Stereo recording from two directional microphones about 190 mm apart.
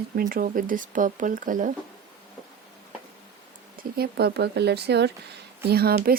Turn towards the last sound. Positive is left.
turn(degrees=-55)  # may be behind; listen again after turning